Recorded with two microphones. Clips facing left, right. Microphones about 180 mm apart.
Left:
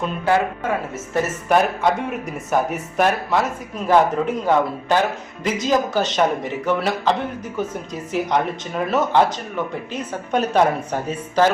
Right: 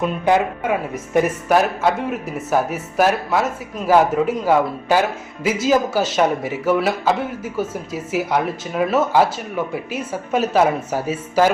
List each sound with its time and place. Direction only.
0.3 s speech: 15° right (ahead or behind)
1.5 s a man's voice: 5° right (ahead or behind)